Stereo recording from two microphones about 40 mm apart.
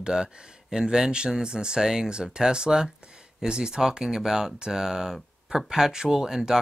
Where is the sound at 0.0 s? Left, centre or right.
Centre.